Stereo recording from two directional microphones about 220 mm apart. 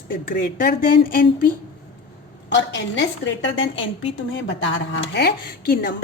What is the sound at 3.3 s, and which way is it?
Speech, 55° left (ahead or behind).